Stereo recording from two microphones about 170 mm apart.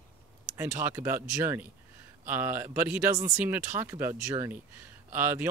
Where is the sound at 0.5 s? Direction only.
15° right (ahead or behind).